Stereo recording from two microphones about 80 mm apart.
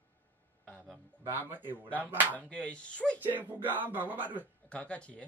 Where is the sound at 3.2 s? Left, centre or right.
Right.